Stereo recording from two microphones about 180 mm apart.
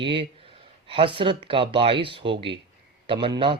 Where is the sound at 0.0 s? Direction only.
30° right (ahead or behind).